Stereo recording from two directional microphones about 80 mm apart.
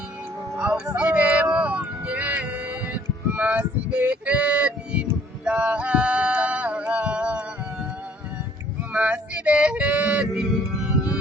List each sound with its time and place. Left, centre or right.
0.6 s a sound: centre
5.5 s male singing: centre
8.8 s yodeling: centre